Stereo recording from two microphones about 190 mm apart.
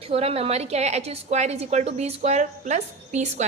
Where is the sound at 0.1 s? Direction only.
30° right (ahead or behind).